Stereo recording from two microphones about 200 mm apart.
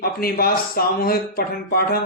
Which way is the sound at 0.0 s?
50° left (ahead or behind).